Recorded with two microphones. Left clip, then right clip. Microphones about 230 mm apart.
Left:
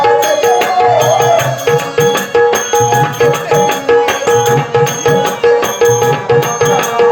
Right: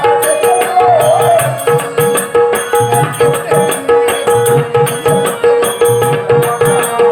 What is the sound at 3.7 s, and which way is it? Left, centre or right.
Music, centre.